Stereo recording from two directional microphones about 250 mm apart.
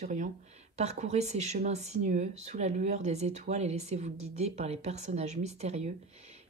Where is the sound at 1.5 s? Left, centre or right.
Right.